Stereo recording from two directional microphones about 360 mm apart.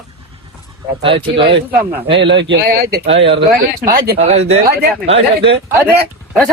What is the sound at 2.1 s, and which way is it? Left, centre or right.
Speech, right.